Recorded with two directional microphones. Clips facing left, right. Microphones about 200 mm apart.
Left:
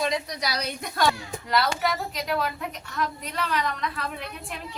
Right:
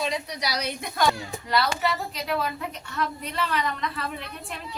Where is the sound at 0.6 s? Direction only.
Centre (ahead or behind).